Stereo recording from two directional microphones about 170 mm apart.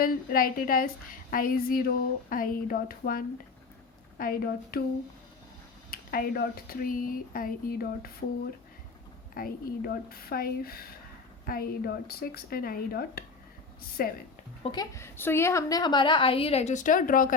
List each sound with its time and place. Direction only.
0.0 s speech: 60° left (ahead or behind)
5.9 s speech: 60° left (ahead or behind)
14.6 s a woman's voice: 25° left (ahead or behind); by 17.3 s 55° left (ahead or behind)